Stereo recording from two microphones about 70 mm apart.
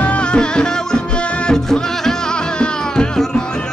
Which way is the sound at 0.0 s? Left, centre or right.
Centre.